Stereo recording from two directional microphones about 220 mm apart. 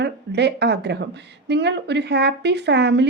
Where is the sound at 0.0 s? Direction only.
50° right (ahead or behind).